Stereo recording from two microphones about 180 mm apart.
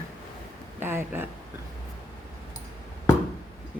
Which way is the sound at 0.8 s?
10° right (ahead or behind).